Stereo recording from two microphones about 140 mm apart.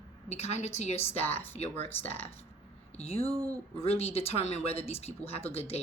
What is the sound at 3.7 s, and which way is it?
Speech, 45° left (ahead or behind).